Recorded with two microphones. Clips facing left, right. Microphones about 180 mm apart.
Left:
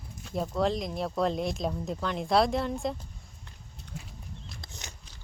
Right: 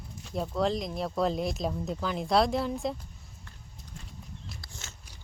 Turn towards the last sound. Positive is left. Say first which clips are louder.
# left 2 dB
turn(degrees=20)  # may be behind; listen again after turning